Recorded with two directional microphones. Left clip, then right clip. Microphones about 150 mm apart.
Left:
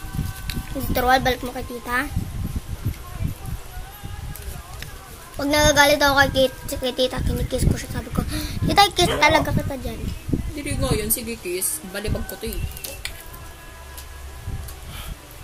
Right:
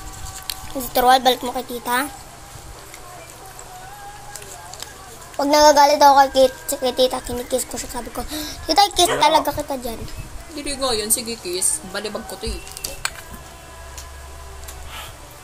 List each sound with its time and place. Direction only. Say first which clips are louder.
0.5 s speech: right 2 dB; 10° left (ahead or behind)
5.4 s a woman's voice: right 4 dB; 15° left (ahead or behind)
10.5 s a woman's voice: right 5 dB; 45° left (ahead or behind)